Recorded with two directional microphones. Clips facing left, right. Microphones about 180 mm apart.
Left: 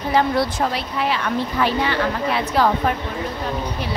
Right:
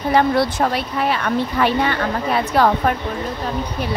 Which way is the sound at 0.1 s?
60° right (ahead or behind).